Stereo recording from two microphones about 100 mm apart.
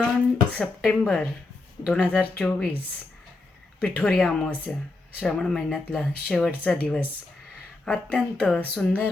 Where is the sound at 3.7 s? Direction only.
10° left (ahead or behind).